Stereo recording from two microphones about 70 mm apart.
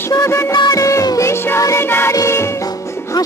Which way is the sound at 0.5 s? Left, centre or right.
Left.